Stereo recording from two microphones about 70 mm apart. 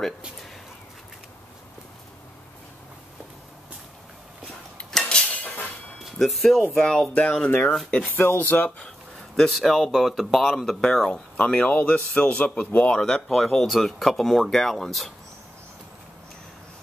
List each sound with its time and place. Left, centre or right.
5.0 s cutlery: centre
6.1 s speech: centre
7.4 s speech: centre
8.2 s a man's voice: left
8.6 s speech: centre
9.4 s speech: centre
11.3 s a man's voice: left
13.0 s speech: centre